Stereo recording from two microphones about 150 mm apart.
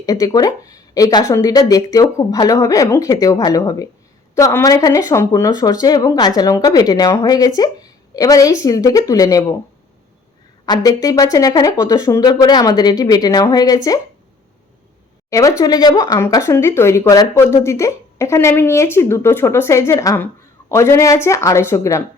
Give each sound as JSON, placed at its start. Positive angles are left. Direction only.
{"t": 0.0, "sound": "speech", "side_deg": 25}
{"t": 10.7, "sound": "speech", "side_deg": 25}
{"t": 15.3, "sound": "speech", "side_deg": 20}